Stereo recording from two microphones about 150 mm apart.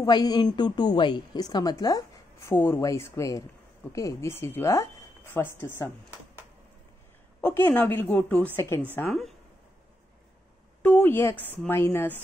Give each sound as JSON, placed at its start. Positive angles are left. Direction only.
{"t": 0.0, "sound": "a woman's voice", "side_deg": 25}
{"t": 7.4, "sound": "speech", "side_deg": 10}
{"t": 8.9, "sound": "speech", "side_deg": 0}
{"t": 10.8, "sound": "speech", "side_deg": 10}